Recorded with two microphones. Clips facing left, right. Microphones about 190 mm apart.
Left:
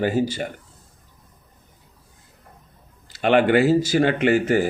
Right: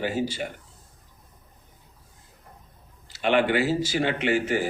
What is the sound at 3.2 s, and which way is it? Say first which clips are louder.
Speech: left 5 dB; 50° left (ahead or behind).